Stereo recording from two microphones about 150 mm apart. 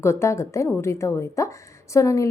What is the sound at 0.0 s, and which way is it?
A woman's voice, 20° left (ahead or behind).